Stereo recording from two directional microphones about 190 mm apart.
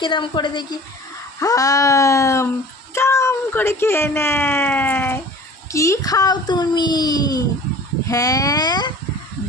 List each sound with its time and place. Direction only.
0.0 s a child's voice: 25° left (ahead or behind)